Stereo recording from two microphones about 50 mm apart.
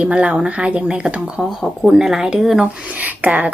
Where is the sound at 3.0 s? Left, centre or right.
Right.